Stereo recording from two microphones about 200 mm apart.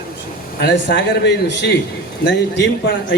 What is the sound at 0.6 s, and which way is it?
Speech, 60° left (ahead or behind).